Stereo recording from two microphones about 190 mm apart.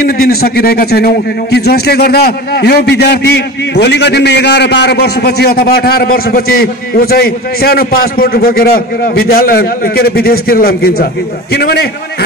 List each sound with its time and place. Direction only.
0.0 s a man's voice: 55° left (ahead or behind)